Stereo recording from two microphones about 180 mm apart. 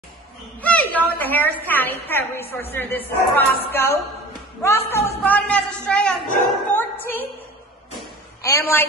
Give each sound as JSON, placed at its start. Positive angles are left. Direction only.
{"t": 0.6, "sound": "a woman's voice", "side_deg": 10}
{"t": 8.4, "sound": "a woman's voice", "side_deg": 15}